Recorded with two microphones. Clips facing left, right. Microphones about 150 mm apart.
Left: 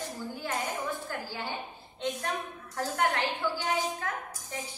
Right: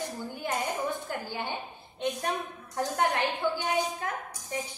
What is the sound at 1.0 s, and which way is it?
Speech, 20° right (ahead or behind).